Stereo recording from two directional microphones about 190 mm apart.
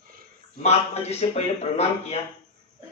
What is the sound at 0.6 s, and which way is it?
Speech, 35° left (ahead or behind).